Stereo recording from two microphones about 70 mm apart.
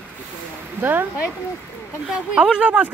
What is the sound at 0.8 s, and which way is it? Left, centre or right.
Speech, right.